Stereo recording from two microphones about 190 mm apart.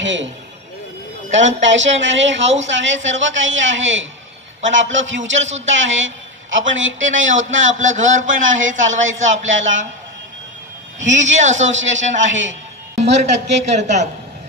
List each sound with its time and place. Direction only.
0.0 s a man's voice: 80° right
1.4 s a woman's voice: 75° right (ahead or behind)
7.6 s a man's voice: 40° right (ahead or behind)
9.5 s a man's voice: 80° right
11.1 s a man's voice: 40° right (ahead or behind)
11.6 s a man's voice: 80° right
13.0 s a man's voice: 35° right (ahead or behind)